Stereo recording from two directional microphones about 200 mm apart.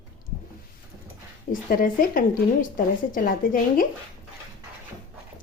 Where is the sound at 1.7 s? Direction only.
45° left (ahead or behind).